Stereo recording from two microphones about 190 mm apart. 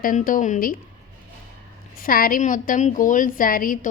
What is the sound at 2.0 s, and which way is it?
A woman's voice, 50° left (ahead or behind).